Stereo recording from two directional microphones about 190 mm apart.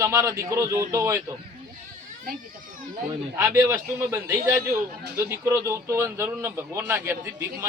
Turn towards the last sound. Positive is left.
turn(degrees=-15)  # may be behind; listen again after turning